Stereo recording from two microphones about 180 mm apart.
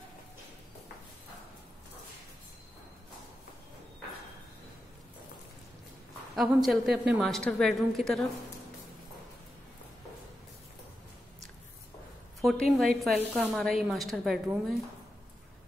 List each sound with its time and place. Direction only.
6.3 s a woman's voice: centre (ahead or behind)
12.4 s a woman's voice: centre (ahead or behind)